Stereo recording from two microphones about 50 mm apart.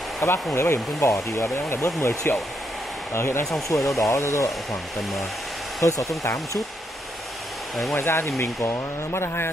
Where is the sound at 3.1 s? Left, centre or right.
Left.